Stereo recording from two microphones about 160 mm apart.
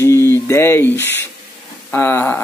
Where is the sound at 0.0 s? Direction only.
15° left (ahead or behind).